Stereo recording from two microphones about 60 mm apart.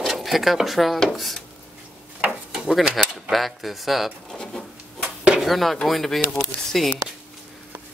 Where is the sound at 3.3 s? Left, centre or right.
Centre.